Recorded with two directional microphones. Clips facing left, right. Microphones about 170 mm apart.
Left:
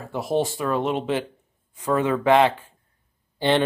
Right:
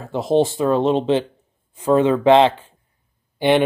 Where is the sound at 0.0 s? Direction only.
25° right (ahead or behind).